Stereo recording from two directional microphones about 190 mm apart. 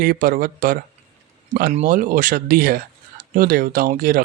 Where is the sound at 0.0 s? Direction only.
50° right (ahead or behind).